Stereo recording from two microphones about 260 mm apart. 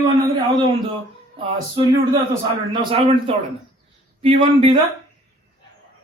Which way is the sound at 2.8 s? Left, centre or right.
Centre.